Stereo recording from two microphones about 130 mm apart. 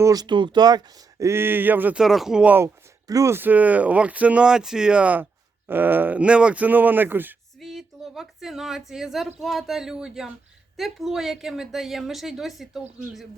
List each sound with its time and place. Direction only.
0.0 s speech: 30° right (ahead or behind); by 2.6 s 10° right (ahead or behind)
3.1 s speech: 25° right (ahead or behind)
7.6 s a woman's voice: centre (ahead or behind)